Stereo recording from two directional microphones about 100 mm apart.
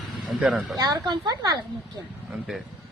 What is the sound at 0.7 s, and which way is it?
Speech, 45° right (ahead or behind).